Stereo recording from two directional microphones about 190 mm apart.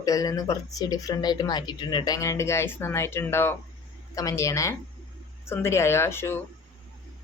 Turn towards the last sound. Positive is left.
turn(degrees=10)  # may be behind; listen again after turning